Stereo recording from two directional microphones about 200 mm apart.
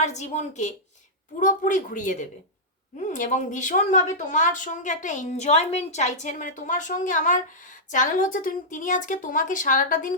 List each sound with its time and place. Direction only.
0.0 s speech: 35° left (ahead or behind)